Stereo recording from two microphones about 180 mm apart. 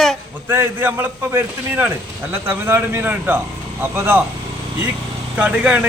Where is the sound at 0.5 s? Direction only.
15° right (ahead or behind).